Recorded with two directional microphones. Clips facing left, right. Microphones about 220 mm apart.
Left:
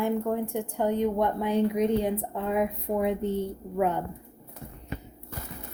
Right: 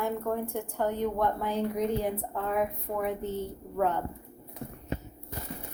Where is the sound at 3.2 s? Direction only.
60° left (ahead or behind).